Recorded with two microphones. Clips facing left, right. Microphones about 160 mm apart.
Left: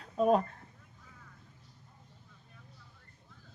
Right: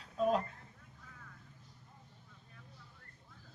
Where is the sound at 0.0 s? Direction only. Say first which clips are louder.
Left 5 dB; 50° left (ahead or behind).